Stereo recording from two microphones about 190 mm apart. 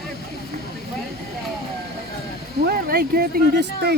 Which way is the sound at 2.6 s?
55° right (ahead or behind).